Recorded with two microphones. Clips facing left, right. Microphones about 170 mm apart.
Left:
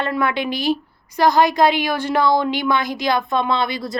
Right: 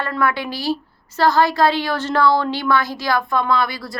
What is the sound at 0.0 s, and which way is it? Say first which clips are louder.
A woman's voice: left 1 dB; 20° left (ahead or behind).